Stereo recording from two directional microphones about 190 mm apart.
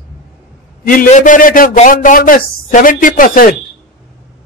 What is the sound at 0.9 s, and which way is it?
A man's voice, 45° left (ahead or behind).